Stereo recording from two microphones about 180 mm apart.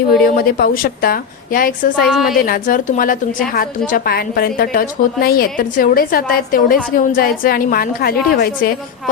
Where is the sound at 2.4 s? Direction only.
50° left (ahead or behind).